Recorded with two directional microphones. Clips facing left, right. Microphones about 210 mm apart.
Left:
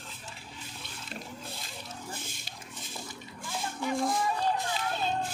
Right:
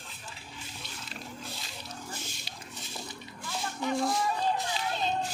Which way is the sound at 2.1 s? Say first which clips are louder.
Even; 55° left (ahead or behind).